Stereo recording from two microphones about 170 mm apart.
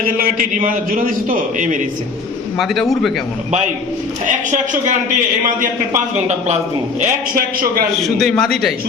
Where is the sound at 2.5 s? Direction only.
Centre (ahead or behind).